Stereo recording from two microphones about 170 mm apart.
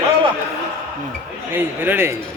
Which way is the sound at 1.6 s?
10° right (ahead or behind).